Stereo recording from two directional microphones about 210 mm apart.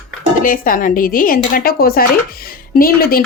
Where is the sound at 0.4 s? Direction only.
40° left (ahead or behind).